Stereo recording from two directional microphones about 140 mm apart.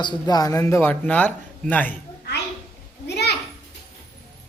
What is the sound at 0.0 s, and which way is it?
A man's voice, 30° left (ahead or behind).